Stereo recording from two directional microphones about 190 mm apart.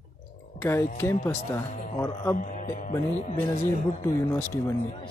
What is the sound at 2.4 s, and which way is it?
Speech, 45° left (ahead or behind).